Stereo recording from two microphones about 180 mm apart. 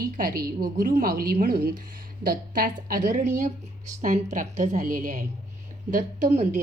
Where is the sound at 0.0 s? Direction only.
55° right (ahead or behind).